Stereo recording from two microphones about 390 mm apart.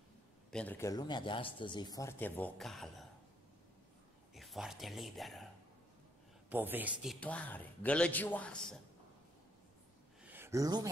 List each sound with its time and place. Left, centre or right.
0.5 s speech: centre
4.3 s speech: centre
6.5 s a man's voice: centre
10.2 s a sound: centre